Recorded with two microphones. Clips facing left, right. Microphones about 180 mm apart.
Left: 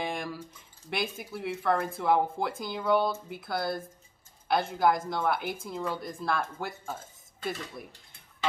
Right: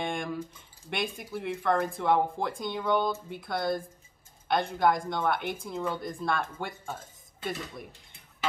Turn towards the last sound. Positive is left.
turn(degrees=0)  # may be behind; listen again after turning